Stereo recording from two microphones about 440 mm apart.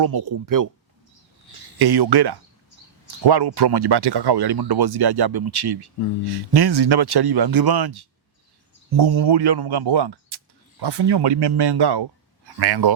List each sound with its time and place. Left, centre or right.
0.0 s speech: right
1.8 s speech: right